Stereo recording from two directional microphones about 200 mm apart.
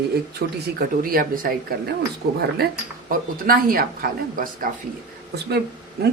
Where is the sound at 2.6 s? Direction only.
50° right (ahead or behind).